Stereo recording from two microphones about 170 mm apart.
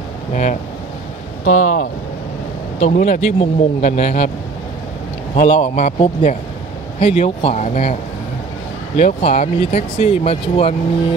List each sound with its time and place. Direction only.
0.3 s speech: 50° left (ahead or behind)
5.3 s speech: 40° left (ahead or behind)
8.9 s speech: 45° left (ahead or behind)